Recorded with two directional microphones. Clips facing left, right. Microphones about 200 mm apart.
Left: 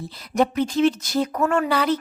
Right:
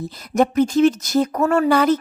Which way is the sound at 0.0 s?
45° right (ahead or behind).